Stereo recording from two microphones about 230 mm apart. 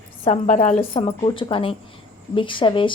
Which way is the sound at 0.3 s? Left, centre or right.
Left.